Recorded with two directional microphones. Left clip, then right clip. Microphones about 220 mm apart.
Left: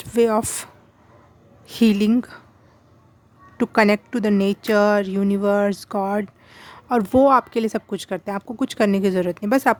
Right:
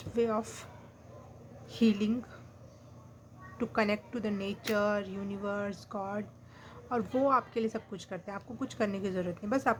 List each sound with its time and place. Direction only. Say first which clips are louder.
0.0 s a woman's voice: left 13 dB; 50° left (ahead or behind)
3.6 s a woman's voice: left 14 dB; 50° left (ahead or behind)